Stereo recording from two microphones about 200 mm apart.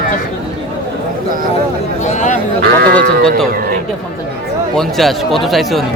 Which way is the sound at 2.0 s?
35° left (ahead or behind).